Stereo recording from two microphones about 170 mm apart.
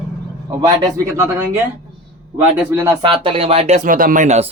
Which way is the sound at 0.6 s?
20° right (ahead or behind).